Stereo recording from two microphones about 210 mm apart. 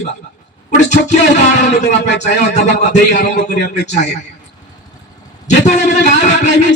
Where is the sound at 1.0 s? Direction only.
35° left (ahead or behind).